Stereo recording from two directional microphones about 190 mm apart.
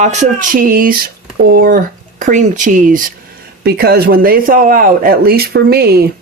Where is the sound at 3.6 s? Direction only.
55° right (ahead or behind).